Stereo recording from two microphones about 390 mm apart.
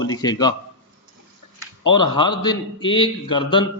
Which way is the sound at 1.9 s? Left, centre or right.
Centre.